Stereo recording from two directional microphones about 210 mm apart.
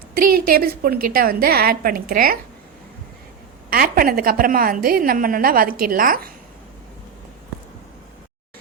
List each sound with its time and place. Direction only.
0.4 s a woman's voice: 45° right (ahead or behind)
3.7 s a woman's voice: 45° right (ahead or behind)